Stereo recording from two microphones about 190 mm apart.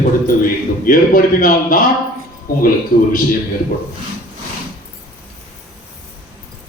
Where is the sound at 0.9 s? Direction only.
45° left (ahead or behind).